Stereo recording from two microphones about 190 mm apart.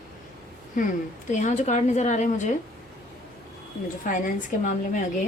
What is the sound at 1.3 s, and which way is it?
A woman's voice, 40° left (ahead or behind).